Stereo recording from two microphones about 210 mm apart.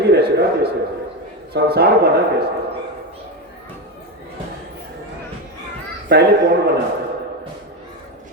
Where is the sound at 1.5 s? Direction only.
50° right (ahead or behind).